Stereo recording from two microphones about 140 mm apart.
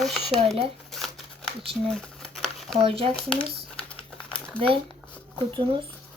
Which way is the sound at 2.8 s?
40° right (ahead or behind).